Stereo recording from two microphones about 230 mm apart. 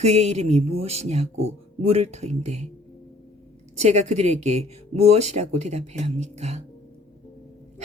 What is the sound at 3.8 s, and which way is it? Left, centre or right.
Speech, right.